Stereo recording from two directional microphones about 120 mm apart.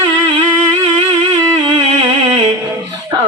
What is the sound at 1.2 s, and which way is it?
Music, 40° right (ahead or behind).